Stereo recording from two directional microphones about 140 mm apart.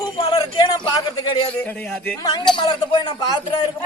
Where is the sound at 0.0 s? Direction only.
25° left (ahead or behind).